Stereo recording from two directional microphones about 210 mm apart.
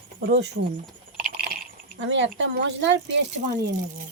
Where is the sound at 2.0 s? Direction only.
60° right (ahead or behind).